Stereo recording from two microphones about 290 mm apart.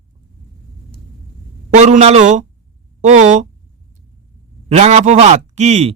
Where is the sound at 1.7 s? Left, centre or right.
Right.